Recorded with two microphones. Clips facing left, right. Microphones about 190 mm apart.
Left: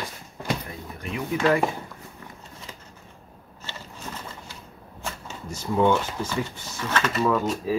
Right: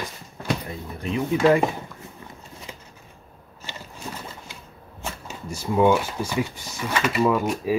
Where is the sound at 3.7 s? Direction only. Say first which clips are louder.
Right 2 dB; 15° right (ahead or behind).